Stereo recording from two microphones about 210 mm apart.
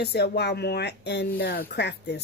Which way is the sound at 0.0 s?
50° left (ahead or behind).